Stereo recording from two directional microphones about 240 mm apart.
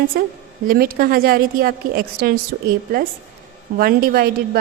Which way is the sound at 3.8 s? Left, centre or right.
Right.